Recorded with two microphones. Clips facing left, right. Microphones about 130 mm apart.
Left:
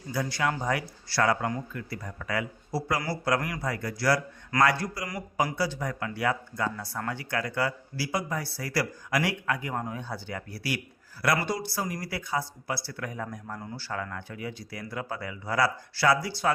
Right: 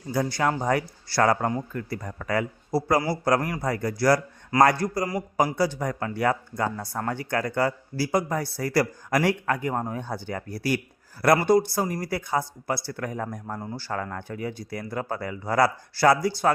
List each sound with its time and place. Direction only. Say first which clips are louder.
0.1 s speech: right 4 dB; 40° right (ahead or behind)